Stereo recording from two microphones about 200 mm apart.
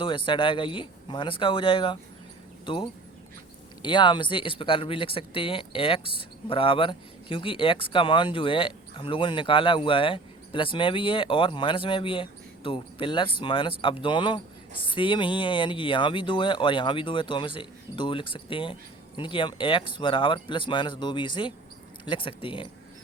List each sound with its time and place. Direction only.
0.0 s speech: 25° left (ahead or behind)